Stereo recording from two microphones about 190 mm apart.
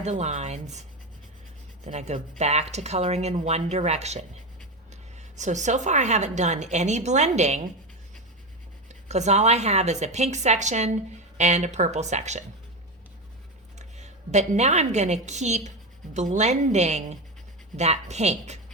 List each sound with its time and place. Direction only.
0.0 s a woman's voice: 35° right (ahead or behind)
9.0 s a woman's voice: 35° right (ahead or behind)
13.7 s a woman's voice: 35° right (ahead or behind)